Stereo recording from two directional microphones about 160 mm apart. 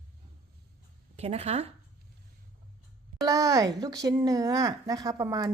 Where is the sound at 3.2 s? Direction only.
20° right (ahead or behind).